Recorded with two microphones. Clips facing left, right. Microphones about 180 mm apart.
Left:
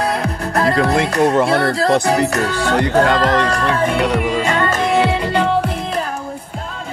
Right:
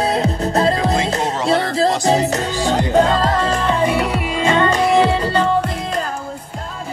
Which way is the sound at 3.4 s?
25° right (ahead or behind).